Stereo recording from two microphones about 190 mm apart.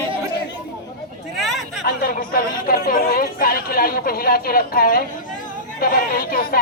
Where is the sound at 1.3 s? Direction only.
Centre (ahead or behind).